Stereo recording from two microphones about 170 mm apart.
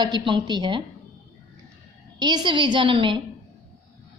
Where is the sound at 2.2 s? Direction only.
25° right (ahead or behind).